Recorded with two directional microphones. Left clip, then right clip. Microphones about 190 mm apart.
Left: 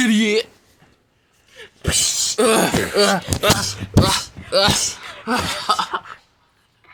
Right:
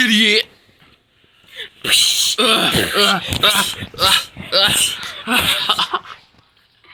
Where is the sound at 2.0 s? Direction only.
45° right (ahead or behind).